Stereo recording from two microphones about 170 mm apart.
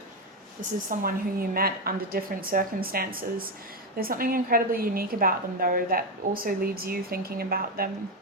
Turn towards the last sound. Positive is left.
turn(degrees=-60)  # may be behind; listen again after turning